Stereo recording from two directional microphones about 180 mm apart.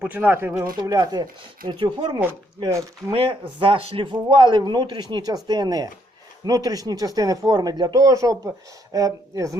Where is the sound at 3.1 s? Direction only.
30° right (ahead or behind).